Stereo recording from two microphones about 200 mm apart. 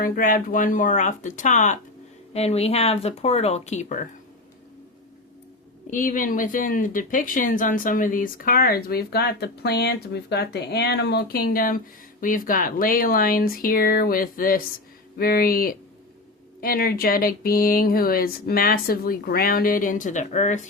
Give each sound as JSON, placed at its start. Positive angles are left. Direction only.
{"t": 0.0, "sound": "speech", "side_deg": 45}
{"t": 5.9, "sound": "speech", "side_deg": 40}